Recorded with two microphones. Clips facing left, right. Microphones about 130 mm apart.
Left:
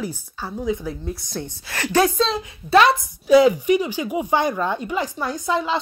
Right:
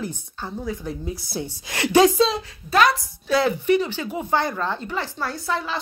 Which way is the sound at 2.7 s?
25° left (ahead or behind).